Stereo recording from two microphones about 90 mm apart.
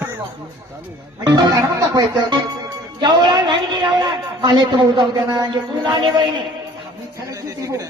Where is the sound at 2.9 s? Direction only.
60° right (ahead or behind).